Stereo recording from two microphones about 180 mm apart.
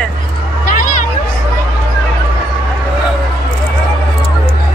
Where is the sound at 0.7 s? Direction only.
50° left (ahead or behind).